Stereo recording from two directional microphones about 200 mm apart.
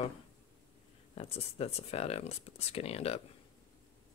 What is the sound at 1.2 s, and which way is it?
Speech, 30° left (ahead or behind).